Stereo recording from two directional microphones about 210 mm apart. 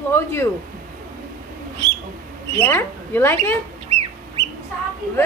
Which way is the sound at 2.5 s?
10° left (ahead or behind).